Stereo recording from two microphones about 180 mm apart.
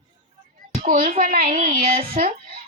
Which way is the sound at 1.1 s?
50° right (ahead or behind).